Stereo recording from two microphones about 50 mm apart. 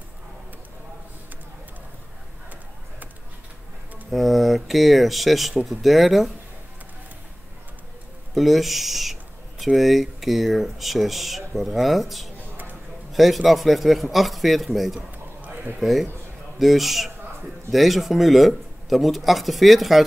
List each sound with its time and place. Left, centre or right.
4.1 s speech: centre
8.4 s speech: centre
15.0 s a sound: right
15.8 s speech: centre